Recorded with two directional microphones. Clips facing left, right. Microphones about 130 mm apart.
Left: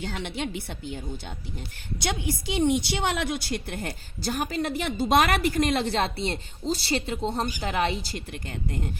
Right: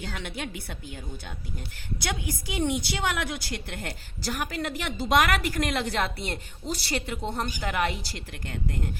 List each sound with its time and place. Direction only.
0.0 s a woman's voice: 25° left (ahead or behind)